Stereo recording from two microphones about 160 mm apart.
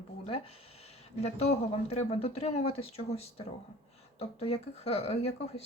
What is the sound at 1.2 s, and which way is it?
Speech, 45° left (ahead or behind).